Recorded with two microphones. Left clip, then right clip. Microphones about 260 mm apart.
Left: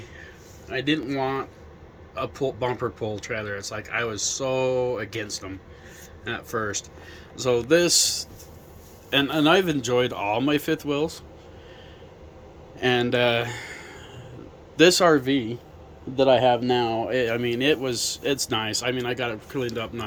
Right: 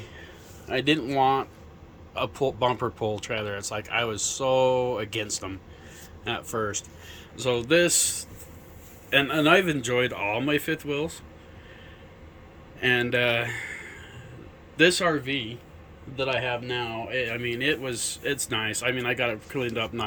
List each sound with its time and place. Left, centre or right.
0.9 s speech: centre
6.5 s speech: centre
12.8 s speech: centre